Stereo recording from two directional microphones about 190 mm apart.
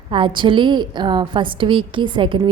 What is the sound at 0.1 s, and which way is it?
A woman's voice, 25° right (ahead or behind).